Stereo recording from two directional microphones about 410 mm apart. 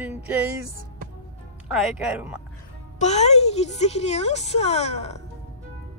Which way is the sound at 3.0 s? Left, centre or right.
Centre.